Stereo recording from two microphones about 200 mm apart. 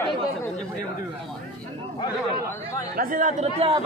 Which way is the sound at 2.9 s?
45° right (ahead or behind).